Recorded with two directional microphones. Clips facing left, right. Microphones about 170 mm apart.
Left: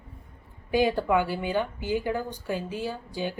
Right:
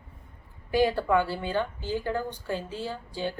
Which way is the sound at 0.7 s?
15° left (ahead or behind).